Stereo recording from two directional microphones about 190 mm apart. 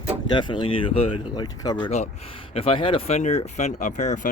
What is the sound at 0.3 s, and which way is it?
Speech, 25° left (ahead or behind).